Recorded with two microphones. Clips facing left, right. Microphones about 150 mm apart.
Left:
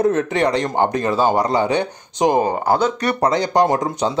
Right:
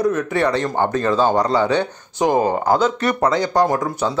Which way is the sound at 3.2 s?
20° left (ahead or behind).